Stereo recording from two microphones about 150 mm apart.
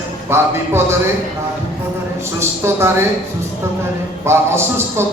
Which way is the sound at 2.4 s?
15° right (ahead or behind).